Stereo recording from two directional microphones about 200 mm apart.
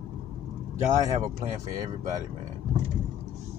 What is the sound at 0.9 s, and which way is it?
Speech, 15° right (ahead or behind).